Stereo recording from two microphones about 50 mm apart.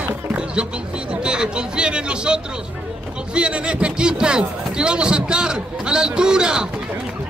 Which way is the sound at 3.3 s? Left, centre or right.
Right.